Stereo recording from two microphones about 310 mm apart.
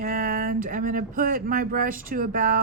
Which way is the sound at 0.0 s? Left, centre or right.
Right.